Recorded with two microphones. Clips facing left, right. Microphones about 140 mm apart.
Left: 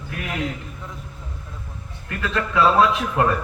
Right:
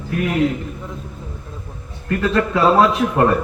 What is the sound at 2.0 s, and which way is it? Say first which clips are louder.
A man's voice: right 8 dB; 40° right (ahead or behind).